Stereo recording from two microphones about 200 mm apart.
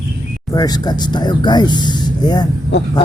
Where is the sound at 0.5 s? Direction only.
20° left (ahead or behind).